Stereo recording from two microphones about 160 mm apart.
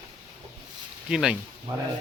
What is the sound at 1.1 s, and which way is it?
Speech, 5° right (ahead or behind).